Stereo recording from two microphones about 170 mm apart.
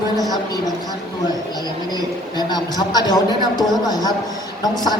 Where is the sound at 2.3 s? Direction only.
25° left (ahead or behind).